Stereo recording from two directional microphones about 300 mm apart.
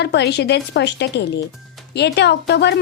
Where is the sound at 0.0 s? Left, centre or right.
Left.